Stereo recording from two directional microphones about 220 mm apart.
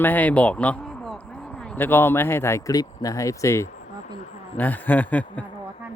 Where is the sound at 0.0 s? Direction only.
10° left (ahead or behind).